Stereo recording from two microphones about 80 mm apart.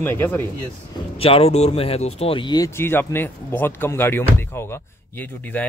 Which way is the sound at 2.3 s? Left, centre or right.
Left.